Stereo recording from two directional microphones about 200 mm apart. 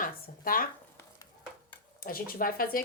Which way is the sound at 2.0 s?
45° left (ahead or behind).